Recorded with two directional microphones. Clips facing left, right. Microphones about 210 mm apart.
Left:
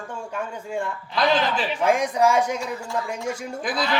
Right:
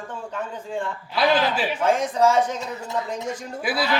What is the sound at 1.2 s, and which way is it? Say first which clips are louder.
Speech: right 1 dB; 5° right (ahead or behind).